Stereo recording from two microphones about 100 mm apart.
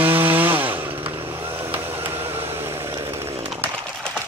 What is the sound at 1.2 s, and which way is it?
Vehicle, 25° right (ahead or behind).